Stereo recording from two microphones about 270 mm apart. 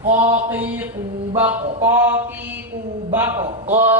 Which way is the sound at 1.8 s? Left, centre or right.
Centre.